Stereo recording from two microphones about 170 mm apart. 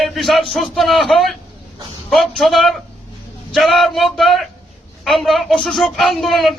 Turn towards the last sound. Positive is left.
turn(degrees=0)  # may be behind; listen again after turning